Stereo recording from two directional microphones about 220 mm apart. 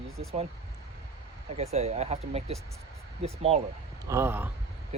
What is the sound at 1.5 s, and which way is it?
Speech, 30° right (ahead or behind).